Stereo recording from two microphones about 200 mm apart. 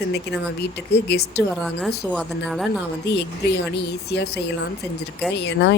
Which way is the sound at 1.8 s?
Centre (ahead or behind).